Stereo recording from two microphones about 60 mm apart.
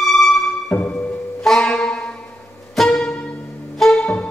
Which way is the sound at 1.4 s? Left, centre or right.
Centre.